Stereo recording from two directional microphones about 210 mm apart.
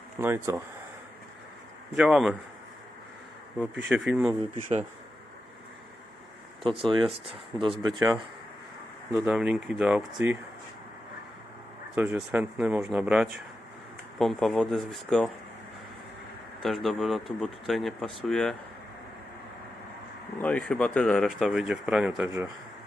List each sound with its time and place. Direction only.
0.2 s speech: 10° right (ahead or behind)
2.0 s speech: 5° right (ahead or behind)
3.8 s speech: 5° right (ahead or behind)
4.5 s speech: 35° right (ahead or behind)
6.7 s speech: 25° right (ahead or behind)
9.1 s speech: 5° right (ahead or behind)
11.9 s speech: 10° right (ahead or behind)
16.6 s speech: centre (ahead or behind)
20.4 s speech: 5° left (ahead or behind)